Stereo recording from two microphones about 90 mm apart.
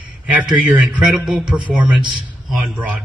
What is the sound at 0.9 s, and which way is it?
Speech, 10° right (ahead or behind).